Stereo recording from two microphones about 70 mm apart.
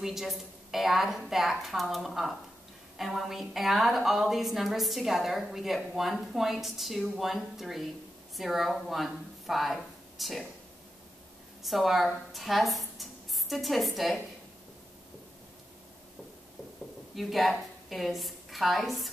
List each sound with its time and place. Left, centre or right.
0.0 s a woman's voice: centre
11.6 s speech: centre
17.1 s a woman's voice: centre